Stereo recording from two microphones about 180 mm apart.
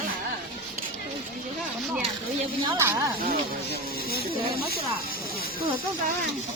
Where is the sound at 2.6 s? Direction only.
15° right (ahead or behind).